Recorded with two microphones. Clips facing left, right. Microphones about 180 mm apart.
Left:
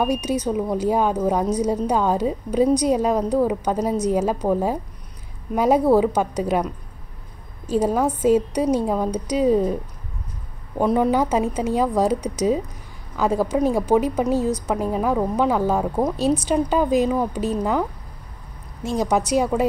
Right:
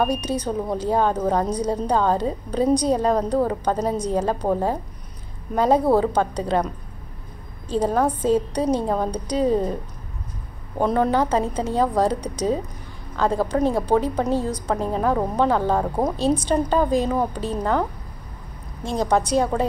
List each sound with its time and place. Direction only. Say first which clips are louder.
0.0 s a woman's voice: left 1 dB; 10° left (ahead or behind)
7.6 s a woman's voice: left 1 dB; 10° left (ahead or behind)
10.8 s a woman's voice: left 1 dB; 10° left (ahead or behind)
18.8 s a woman's voice: even; 5° left (ahead or behind)